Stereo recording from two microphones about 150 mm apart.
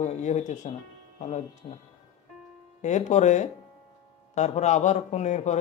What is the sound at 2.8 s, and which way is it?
A man's voice, 50° left (ahead or behind).